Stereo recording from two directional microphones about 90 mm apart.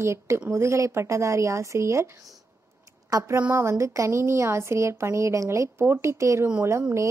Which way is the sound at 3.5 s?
30° right (ahead or behind).